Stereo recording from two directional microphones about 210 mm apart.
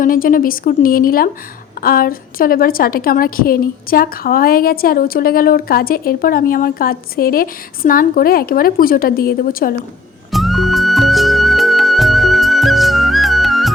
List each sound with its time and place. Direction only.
0.0 s a woman's voice: 40° left (ahead or behind)
10.3 s music: centre (ahead or behind)